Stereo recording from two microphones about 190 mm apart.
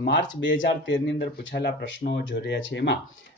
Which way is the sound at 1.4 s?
60° left (ahead or behind).